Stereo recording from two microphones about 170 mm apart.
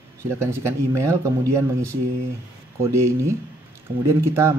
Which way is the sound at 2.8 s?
15° right (ahead or behind).